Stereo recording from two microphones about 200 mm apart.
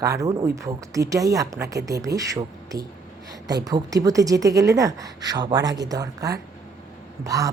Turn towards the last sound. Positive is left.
turn(degrees=-15)  # may be behind; listen again after turning